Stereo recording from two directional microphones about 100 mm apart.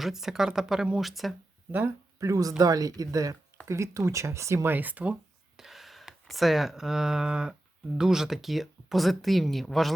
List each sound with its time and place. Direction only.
0.0 s speech: 5° right (ahead or behind)
2.1 s speech: 30° right (ahead or behind); by 5.1 s 15° right (ahead or behind)
5.5 s speech: centre (ahead or behind)